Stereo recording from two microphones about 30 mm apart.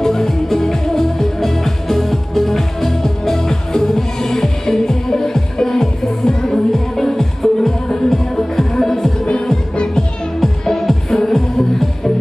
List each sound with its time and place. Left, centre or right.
0.0 s music: centre
10.4 s music: centre